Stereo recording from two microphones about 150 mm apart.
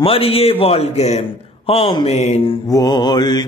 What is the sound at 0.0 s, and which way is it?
A man's voice, 40° left (ahead or behind).